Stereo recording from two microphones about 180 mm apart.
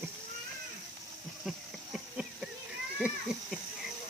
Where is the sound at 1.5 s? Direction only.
5° right (ahead or behind).